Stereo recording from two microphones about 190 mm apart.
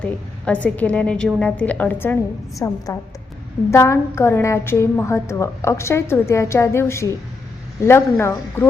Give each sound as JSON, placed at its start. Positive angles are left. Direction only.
{"t": 0.0, "sound": "a woman's voice", "side_deg": 5}